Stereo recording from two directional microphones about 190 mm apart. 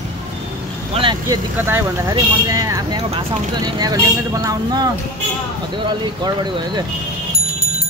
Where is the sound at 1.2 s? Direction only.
15° right (ahead or behind).